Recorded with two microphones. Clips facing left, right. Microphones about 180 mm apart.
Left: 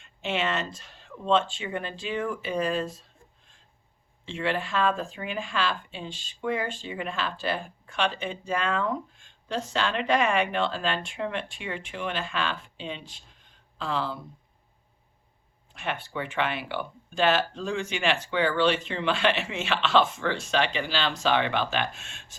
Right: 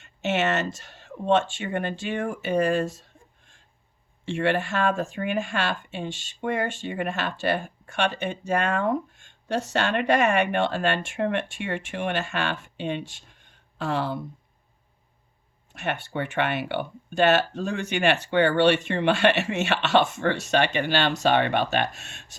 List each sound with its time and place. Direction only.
0.2 s speech: 70° right (ahead or behind); by 2.4 s 50° right (ahead or behind)
2.4 s speech: 70° right (ahead or behind)
4.4 s speech: 55° right (ahead or behind)
5.5 s speech: 60° right (ahead or behind)
9.7 s speech: 55° right (ahead or behind)
10.4 s speech: 70° right (ahead or behind)
15.9 s speech: 60° right (ahead or behind)
19.6 s speech: 45° right (ahead or behind)